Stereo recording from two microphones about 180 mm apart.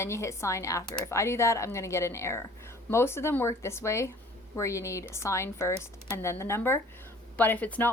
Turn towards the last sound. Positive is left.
turn(degrees=10)  # may be behind; listen again after turning